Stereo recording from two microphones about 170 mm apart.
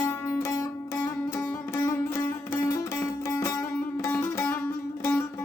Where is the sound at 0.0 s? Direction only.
15° left (ahead or behind).